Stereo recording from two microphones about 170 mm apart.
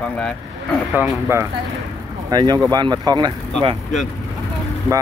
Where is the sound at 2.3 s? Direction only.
25° right (ahead or behind).